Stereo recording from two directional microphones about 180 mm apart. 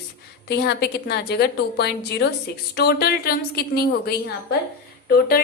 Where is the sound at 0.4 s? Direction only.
65° left (ahead or behind).